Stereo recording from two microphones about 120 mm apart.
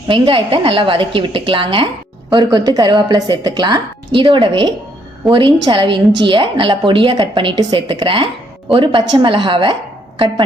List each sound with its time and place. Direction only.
0.1 s a woman's voice: 45° right (ahead or behind)
2.3 s a woman's voice: 35° right (ahead or behind)